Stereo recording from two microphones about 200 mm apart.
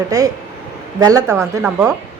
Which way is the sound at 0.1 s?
15° right (ahead or behind).